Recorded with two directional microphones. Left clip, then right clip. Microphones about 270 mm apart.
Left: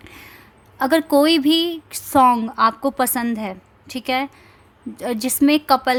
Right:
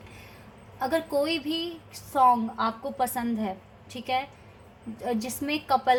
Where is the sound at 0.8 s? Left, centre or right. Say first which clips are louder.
Left 10 dB; left.